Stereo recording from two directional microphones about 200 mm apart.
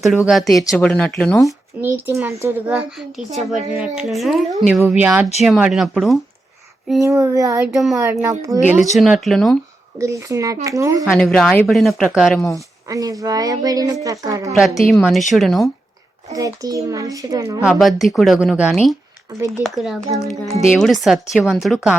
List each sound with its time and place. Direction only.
0.0 s speech: centre (ahead or behind)
1.8 s a woman's voice: 10° right (ahead or behind)
7.0 s a woman's voice: 15° right (ahead or behind); by 9.6 s centre (ahead or behind)
10.0 s a woman's voice: 15° right (ahead or behind)
11.0 s speech: 5° left (ahead or behind)
12.5 s a woman's voice: 15° right (ahead or behind)
14.6 s speech: centre (ahead or behind)
16.3 s a woman's voice: 15° right (ahead or behind)
17.6 s speech: 5° right (ahead or behind)